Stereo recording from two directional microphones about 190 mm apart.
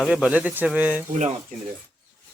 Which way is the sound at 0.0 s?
5° right (ahead or behind).